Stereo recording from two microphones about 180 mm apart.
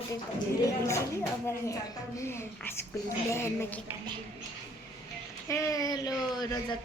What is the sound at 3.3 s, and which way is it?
Speech, 15° left (ahead or behind).